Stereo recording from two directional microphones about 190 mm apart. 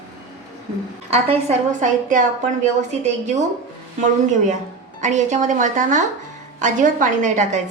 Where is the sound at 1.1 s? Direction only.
35° right (ahead or behind).